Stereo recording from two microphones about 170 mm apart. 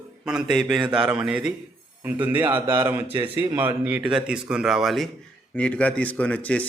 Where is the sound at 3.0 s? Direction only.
30° right (ahead or behind).